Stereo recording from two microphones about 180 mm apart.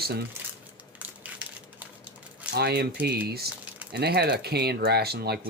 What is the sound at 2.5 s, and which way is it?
Speech, 65° right (ahead or behind).